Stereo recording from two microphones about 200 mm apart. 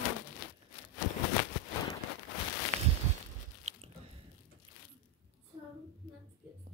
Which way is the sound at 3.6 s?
35° right (ahead or behind).